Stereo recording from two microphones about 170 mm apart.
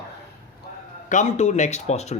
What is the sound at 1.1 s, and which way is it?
Speech, 45° left (ahead or behind).